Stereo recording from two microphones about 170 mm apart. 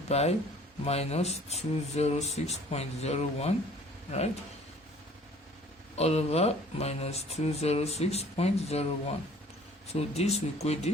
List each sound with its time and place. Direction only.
0.1 s speech: 40° left (ahead or behind)
6.0 s speech: 40° left (ahead or behind)